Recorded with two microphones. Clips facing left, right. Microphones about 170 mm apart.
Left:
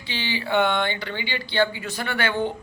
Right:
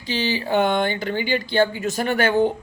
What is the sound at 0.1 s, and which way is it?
Speech, 40° right (ahead or behind).